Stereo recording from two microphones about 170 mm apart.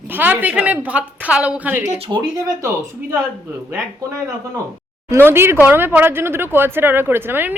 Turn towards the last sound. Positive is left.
turn(degrees=-10)  # may be behind; listen again after turning